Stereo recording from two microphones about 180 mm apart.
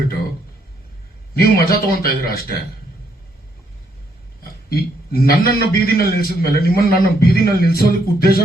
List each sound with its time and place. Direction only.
1.4 s a man's voice: 55° left (ahead or behind)
4.8 s a man's voice: 55° left (ahead or behind)